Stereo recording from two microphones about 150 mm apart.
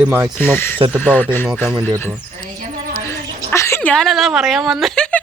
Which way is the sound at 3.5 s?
20° left (ahead or behind).